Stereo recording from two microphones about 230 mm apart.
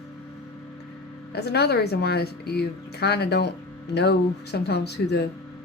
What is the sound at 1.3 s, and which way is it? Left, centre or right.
Speech, left.